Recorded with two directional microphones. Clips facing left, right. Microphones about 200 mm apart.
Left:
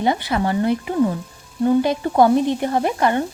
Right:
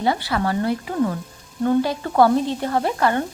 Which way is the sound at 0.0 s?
20° left (ahead or behind).